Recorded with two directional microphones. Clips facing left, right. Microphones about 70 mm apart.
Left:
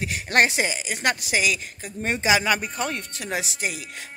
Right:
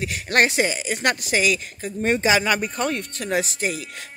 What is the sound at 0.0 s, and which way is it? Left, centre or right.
Speech, left.